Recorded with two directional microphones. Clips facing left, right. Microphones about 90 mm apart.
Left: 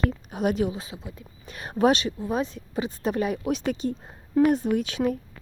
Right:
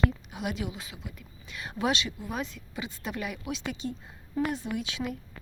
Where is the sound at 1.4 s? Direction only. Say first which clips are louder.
Left 8 dB; 45° left (ahead or behind).